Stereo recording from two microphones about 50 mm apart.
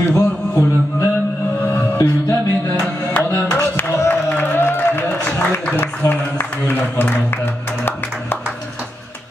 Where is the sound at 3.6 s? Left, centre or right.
Left.